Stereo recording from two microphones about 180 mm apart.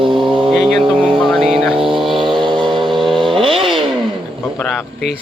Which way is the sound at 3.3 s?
30° right (ahead or behind).